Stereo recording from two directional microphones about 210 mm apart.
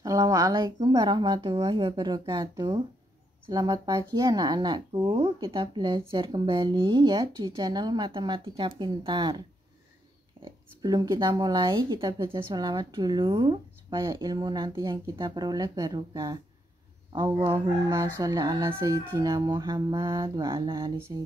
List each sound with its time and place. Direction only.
0.0 s speech: 15° right (ahead or behind)
10.4 s speech: 20° right (ahead or behind)